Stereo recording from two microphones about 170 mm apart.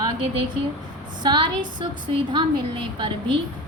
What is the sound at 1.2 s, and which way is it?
Speech, 25° right (ahead or behind).